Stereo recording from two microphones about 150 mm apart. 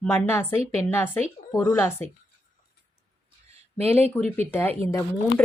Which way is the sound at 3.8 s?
10° left (ahead or behind).